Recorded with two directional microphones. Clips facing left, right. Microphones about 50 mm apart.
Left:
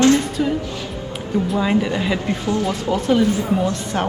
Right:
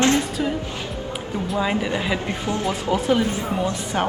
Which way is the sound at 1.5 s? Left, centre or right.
Centre.